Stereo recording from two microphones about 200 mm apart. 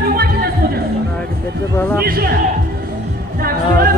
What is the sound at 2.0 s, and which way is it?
Speech, 50° right (ahead or behind).